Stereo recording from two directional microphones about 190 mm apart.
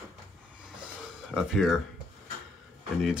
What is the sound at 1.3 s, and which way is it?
Speech, centre (ahead or behind).